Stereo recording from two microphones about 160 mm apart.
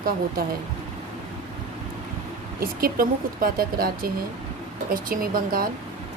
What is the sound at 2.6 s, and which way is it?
Speech, 65° right (ahead or behind).